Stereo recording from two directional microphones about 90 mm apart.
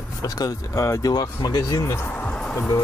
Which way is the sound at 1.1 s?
50° left (ahead or behind).